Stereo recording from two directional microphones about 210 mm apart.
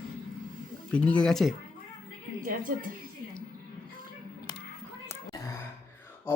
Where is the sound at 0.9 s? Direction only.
5° left (ahead or behind).